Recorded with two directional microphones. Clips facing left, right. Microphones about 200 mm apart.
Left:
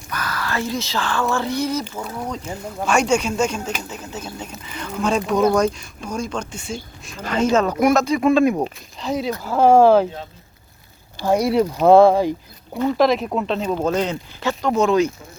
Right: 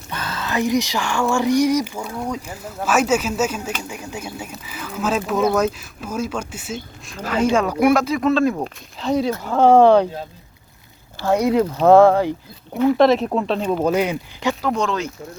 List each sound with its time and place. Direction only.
0.1 s speech: 25° right (ahead or behind); by 8.2 s 5° right (ahead or behind)
8.2 s speech: 15° left (ahead or behind)
8.6 s speech: centre (ahead or behind)
11.2 s speech: 15° left (ahead or behind)
12.7 s speech: 5° right (ahead or behind)
14.7 s speech: 10° left (ahead or behind)